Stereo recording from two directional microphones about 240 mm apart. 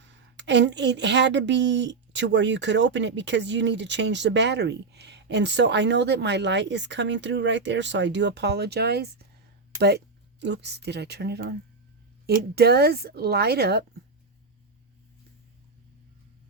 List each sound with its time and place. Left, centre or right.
0.0 s a woman's voice: right